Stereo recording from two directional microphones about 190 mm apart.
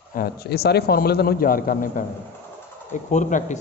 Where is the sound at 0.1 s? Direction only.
55° left (ahead or behind).